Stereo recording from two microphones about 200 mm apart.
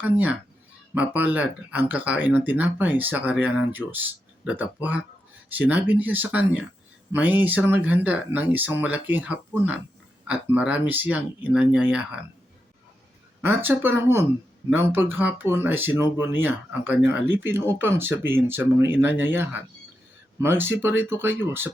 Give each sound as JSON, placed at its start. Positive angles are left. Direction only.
{"t": 0.0, "sound": "speech", "side_deg": -10}
{"t": 13.4, "sound": "speech", "side_deg": -10}